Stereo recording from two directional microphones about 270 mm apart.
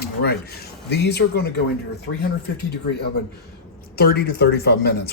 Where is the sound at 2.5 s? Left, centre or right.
Left.